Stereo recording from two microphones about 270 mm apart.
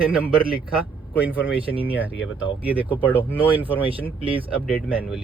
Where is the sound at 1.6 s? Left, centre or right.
Centre.